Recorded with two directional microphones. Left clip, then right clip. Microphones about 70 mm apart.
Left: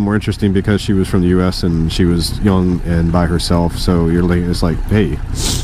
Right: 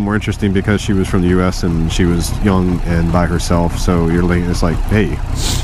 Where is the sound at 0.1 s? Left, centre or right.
Centre.